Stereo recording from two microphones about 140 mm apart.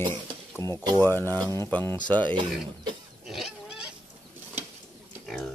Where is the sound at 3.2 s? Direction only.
Centre (ahead or behind).